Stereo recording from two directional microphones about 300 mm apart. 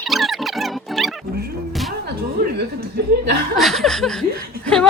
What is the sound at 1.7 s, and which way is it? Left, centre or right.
Music, centre.